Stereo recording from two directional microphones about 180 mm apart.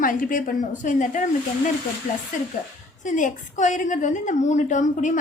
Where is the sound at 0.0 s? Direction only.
50° left (ahead or behind).